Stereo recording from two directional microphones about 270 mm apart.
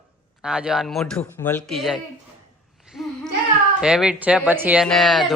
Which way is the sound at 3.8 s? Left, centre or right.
Centre.